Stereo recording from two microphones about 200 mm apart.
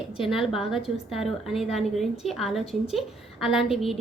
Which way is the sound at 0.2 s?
Centre (ahead or behind).